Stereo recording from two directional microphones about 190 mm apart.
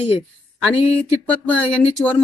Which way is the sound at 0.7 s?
30° left (ahead or behind).